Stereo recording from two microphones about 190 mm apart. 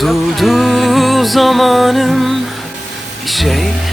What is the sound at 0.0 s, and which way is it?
Music, centre (ahead or behind).